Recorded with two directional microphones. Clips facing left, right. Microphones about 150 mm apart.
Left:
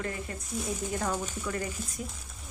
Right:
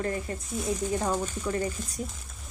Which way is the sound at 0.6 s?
Centre (ahead or behind).